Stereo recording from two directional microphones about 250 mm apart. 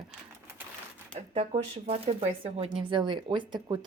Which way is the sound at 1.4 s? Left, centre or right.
Right.